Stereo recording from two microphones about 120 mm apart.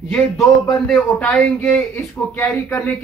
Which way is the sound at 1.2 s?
10° left (ahead or behind).